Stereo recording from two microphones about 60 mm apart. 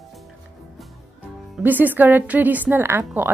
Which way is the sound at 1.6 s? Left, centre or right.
Right.